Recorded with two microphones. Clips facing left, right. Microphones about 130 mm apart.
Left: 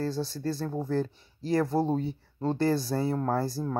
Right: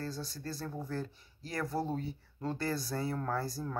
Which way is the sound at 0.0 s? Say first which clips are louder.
Left 10 dB; 30° left (ahead or behind).